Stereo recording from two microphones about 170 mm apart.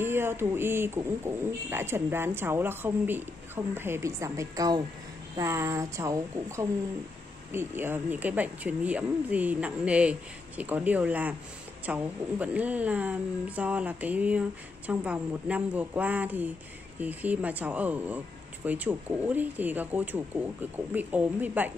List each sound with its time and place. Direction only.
0.0 s speech: 15° right (ahead or behind)